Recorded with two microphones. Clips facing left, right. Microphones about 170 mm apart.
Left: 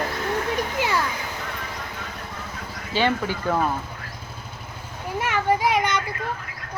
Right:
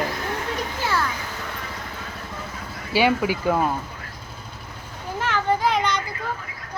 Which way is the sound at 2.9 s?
10° right (ahead or behind).